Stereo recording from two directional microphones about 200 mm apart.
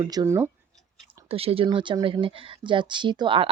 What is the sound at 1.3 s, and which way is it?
Speech, 30° right (ahead or behind).